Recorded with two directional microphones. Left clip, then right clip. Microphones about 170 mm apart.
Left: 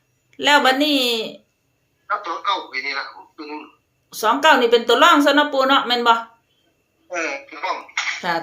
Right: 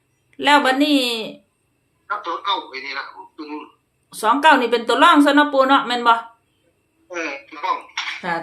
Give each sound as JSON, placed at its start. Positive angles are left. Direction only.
{"t": 0.3, "sound": "speech", "side_deg": 0}
{"t": 2.0, "sound": "a man's voice", "side_deg": 30}
{"t": 4.1, "sound": "speech", "side_deg": 0}
{"t": 7.1, "sound": "speech", "side_deg": 25}
{"t": 8.2, "sound": "speech", "side_deg": 15}